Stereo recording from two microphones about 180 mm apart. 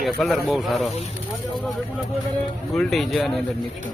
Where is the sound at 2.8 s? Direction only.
Centre (ahead or behind).